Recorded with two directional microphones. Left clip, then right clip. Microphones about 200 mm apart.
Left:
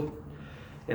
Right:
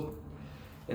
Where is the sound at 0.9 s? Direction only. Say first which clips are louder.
Left 5 dB; 50° left (ahead or behind).